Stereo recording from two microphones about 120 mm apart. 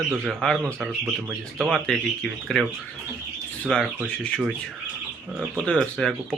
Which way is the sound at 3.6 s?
5° left (ahead or behind).